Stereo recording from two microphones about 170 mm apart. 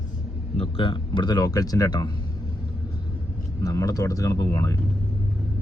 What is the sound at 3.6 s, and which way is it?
Speech, 20° left (ahead or behind).